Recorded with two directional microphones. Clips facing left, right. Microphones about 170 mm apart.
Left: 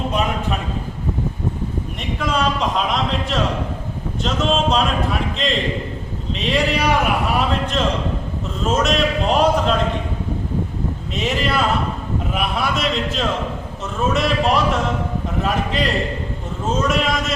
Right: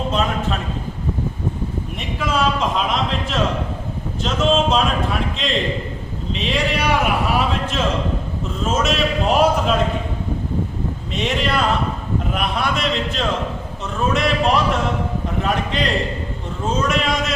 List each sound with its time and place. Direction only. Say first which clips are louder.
2.0 s a man's voice: even; 5° right (ahead or behind)
11.1 s a man's voice: even; centre (ahead or behind)